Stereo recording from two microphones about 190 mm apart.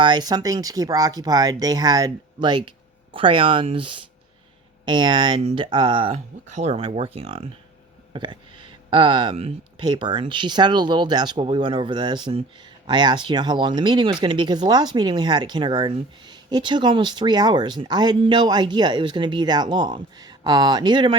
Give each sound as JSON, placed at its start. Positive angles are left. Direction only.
{"t": 0.0, "sound": "speech", "side_deg": -20}